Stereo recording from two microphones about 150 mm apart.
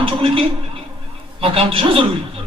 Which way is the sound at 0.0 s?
35° right (ahead or behind).